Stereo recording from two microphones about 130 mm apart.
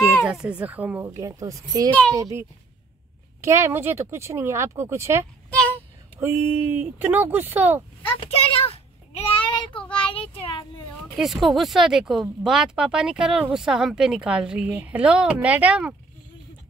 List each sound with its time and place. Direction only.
0.2 s a child's voice: 5° right (ahead or behind)
5.5 s a sound: 10° left (ahead or behind)
6.1 s a child's voice: 20° right (ahead or behind)
8.0 s a sound: 45° left (ahead or behind)
9.9 s child singing: 40° left (ahead or behind)
11.1 s a child's voice: centre (ahead or behind)